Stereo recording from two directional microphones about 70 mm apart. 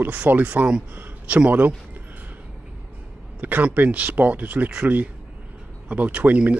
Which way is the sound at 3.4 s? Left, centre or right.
Right.